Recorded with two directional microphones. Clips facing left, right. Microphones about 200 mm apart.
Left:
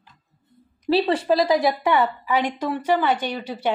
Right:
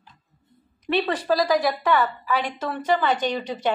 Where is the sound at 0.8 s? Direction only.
30° left (ahead or behind).